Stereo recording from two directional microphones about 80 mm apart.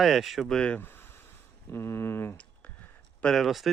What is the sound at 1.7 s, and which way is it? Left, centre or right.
Speech, left.